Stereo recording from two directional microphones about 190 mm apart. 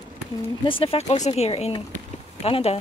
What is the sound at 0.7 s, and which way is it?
Speech, 30° left (ahead or behind).